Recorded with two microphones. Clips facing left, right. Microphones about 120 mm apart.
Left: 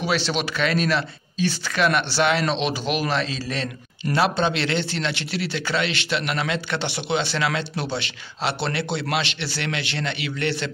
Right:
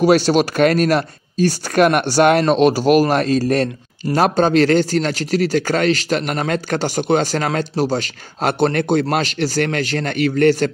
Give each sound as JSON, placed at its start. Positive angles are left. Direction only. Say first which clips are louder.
{"t": 0.0, "sound": "speech", "louder": "right 11 dB", "side_deg": -45}